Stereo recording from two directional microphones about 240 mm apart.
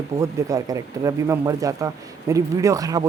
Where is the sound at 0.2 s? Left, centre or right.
Centre.